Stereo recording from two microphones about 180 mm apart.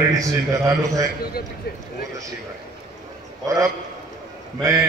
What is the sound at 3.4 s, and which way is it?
Speech, 20° right (ahead or behind).